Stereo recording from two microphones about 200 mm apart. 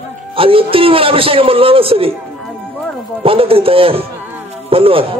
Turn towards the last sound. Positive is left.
turn(degrees=-30)  # may be behind; listen again after turning